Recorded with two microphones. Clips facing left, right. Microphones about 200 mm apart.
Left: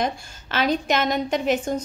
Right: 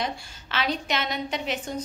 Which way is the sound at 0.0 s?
45° left (ahead or behind).